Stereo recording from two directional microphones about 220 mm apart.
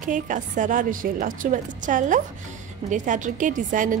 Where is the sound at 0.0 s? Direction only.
35° right (ahead or behind).